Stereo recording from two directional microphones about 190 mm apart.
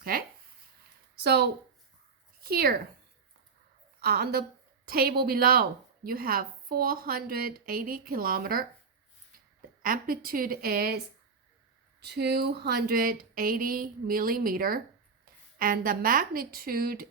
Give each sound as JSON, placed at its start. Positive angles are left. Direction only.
{"t": 0.0, "sound": "a sound", "side_deg": -50}
{"t": 2.4, "sound": "speech", "side_deg": -55}
{"t": 4.0, "sound": "a woman's voice", "side_deg": -55}